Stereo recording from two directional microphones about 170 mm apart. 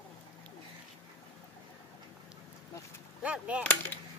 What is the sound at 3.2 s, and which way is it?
Whip, 5° right (ahead or behind).